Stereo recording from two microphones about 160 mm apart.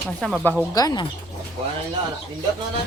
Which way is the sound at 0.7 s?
25° left (ahead or behind).